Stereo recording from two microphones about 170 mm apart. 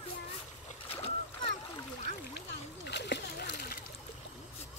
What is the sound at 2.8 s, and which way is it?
Splash, 85° left.